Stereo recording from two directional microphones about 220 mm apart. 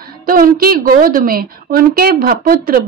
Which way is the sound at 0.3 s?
40° right (ahead or behind).